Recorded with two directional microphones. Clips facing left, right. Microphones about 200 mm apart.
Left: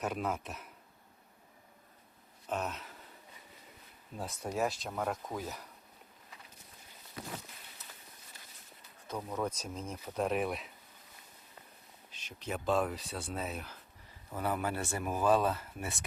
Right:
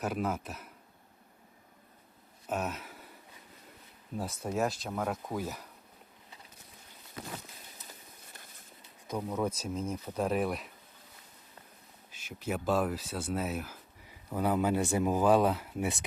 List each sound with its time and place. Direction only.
0.0 s speech: centre (ahead or behind)
2.5 s a sound: 5° right (ahead or behind)
4.2 s speech: 5° right (ahead or behind)
9.0 s speech: 10° right (ahead or behind)
12.1 s speech: 5° right (ahead or behind)